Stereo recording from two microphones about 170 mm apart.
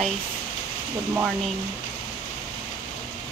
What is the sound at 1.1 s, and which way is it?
Speech, 5° right (ahead or behind).